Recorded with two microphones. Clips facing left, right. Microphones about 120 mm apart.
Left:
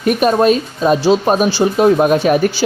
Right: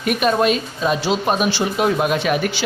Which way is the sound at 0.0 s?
40° left (ahead or behind).